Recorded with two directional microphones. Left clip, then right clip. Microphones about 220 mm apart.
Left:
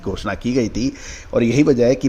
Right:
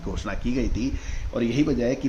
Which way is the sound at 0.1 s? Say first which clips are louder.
Left 8 dB; 35° left (ahead or behind).